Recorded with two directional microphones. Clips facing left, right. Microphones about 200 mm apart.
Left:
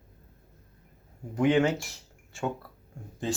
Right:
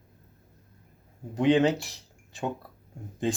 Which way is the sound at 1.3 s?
20° right (ahead or behind).